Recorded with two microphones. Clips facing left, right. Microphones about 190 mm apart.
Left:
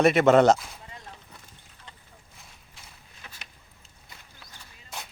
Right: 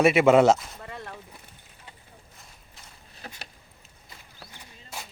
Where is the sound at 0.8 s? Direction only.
65° right (ahead or behind).